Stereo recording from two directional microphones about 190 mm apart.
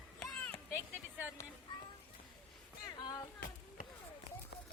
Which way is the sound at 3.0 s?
20° left (ahead or behind).